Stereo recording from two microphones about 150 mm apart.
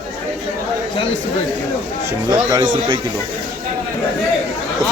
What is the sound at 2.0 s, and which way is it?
Speech, 25° right (ahead or behind).